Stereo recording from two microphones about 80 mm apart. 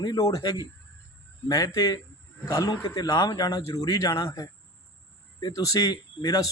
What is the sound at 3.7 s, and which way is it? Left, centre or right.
Speech, left.